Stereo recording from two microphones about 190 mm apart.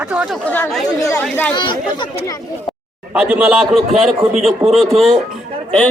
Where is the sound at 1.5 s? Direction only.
25° left (ahead or behind).